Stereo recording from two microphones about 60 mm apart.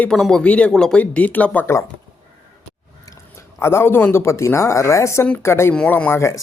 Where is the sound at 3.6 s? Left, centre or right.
Left.